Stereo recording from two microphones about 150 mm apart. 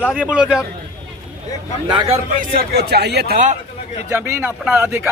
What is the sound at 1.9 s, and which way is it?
Speech, 30° right (ahead or behind).